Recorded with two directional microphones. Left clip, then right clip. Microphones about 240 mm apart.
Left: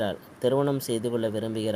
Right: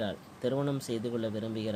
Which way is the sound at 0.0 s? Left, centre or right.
Left.